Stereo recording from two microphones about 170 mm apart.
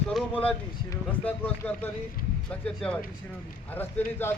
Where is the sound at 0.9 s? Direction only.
10° left (ahead or behind).